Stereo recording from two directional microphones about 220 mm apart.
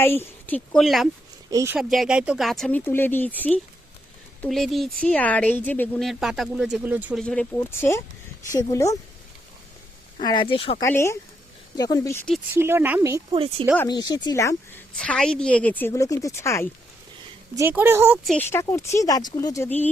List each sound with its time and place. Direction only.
0.0 s a woman's voice: 10° left (ahead or behind)
1.5 s speech: 15° right (ahead or behind)
7.2 s a woman's voice: 5° left (ahead or behind)
10.2 s speech: 20° left (ahead or behind)
10.8 s a woman's voice: 10° left (ahead or behind)
12.5 s speech: 10° right (ahead or behind)
13.7 s a woman's voice: 20° left (ahead or behind)
17.6 s speech: 10° right (ahead or behind)
18.3 s a woman's voice: 10° left (ahead or behind)